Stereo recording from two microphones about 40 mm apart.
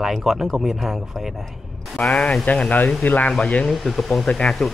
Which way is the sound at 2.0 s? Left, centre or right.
Left.